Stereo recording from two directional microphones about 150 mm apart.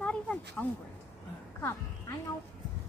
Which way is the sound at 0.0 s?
10° left (ahead or behind).